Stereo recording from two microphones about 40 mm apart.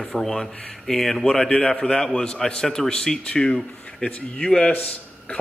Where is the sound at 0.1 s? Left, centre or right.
Centre.